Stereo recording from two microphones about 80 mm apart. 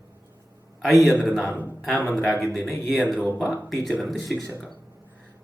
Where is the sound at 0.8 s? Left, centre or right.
Centre.